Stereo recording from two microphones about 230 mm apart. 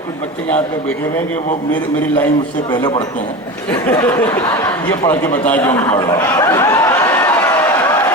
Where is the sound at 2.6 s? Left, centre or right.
Centre.